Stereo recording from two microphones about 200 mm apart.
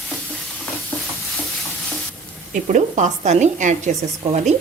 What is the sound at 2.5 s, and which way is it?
Stir, 40° right (ahead or behind).